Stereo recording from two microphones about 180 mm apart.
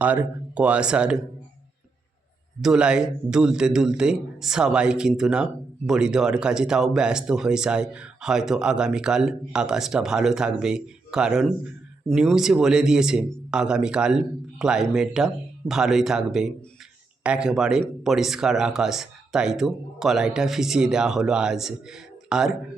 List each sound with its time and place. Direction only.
0.0 s a man's voice: 10° right (ahead or behind)
2.6 s a man's voice: 5° right (ahead or behind)